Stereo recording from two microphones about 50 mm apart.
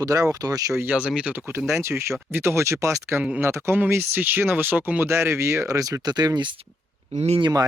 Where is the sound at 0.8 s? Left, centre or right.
Right.